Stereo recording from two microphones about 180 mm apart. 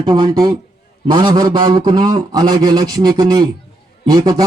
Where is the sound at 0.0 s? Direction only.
25° right (ahead or behind).